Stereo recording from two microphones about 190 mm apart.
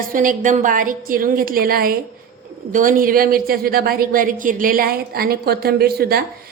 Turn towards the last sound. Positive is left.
turn(degrees=-55)  # may be behind; listen again after turning